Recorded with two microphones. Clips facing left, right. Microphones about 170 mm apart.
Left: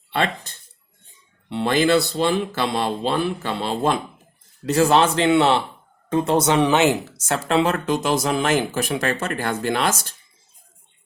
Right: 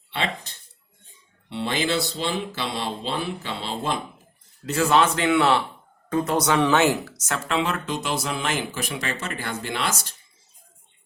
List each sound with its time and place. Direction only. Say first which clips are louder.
0.1 s a sound: left 5 dB; 50° left (ahead or behind)
1.5 s speech: left 7 dB; 50° left (ahead or behind)
4.6 s speech: left 3 dB; 35° left (ahead or behind)